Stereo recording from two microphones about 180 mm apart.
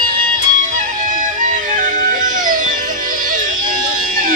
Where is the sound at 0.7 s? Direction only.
45° right (ahead or behind).